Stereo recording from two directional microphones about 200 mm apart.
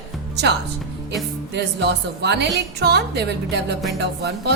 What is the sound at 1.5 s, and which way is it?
A woman's voice, 60° right (ahead or behind).